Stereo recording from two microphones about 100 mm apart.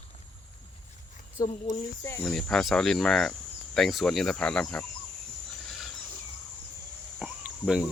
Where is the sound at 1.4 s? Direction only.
30° left (ahead or behind).